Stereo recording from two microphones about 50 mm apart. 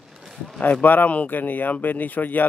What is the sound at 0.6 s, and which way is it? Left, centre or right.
Speech, left.